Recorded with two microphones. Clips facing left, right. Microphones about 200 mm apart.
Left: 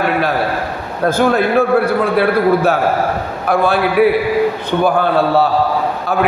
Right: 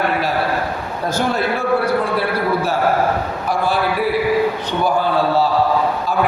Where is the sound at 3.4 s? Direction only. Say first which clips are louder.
Left 7 dB; 60° left (ahead or behind).